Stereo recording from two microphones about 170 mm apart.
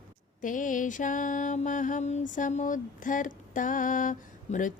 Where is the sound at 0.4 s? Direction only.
50° left (ahead or behind).